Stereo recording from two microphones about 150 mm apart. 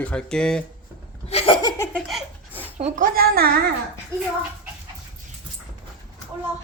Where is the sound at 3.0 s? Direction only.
85° right.